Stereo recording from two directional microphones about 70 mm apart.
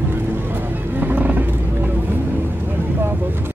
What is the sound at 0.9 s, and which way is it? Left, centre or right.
Music, right.